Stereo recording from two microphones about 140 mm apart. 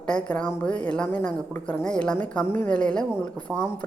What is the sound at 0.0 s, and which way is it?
A woman's voice, 5° left (ahead or behind).